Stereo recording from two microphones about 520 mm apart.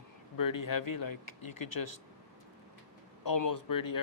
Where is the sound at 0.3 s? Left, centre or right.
Left.